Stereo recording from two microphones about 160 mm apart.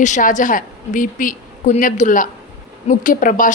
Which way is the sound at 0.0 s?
55° left (ahead or behind).